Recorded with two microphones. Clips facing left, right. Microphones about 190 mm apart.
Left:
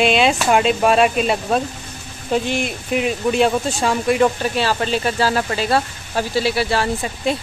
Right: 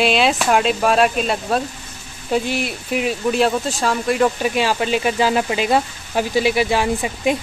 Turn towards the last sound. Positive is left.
turn(degrees=-15)  # may be behind; listen again after turning